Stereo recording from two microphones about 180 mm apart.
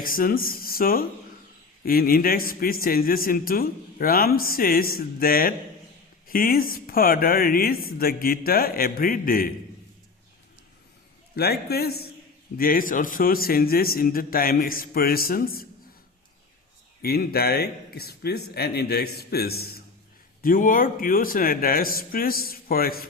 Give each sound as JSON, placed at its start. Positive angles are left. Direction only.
{"t": 0.0, "sound": "a man's voice", "side_deg": 50}
{"t": 11.3, "sound": "a man's voice", "side_deg": 60}
{"t": 17.0, "sound": "speech", "side_deg": 60}
{"t": 20.4, "sound": "a man's voice", "side_deg": 50}